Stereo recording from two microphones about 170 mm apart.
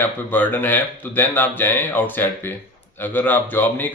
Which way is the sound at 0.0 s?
10° left (ahead or behind).